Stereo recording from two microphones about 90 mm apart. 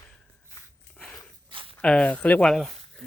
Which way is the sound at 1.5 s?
75° right (ahead or behind).